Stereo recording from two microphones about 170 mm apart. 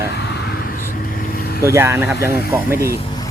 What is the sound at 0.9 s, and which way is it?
Vehicle, 60° left (ahead or behind).